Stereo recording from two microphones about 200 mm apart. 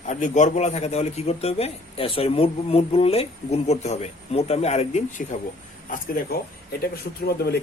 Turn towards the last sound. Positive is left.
turn(degrees=50)  # may be behind; listen again after turning